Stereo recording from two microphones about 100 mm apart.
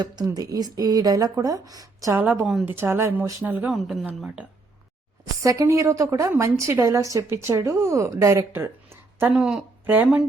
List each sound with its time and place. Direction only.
0.3 s a woman's voice: 40° right (ahead or behind)
2.1 s speech: 20° right (ahead or behind)
5.4 s a woman's voice: 30° right (ahead or behind)
9.3 s speech: 10° right (ahead or behind)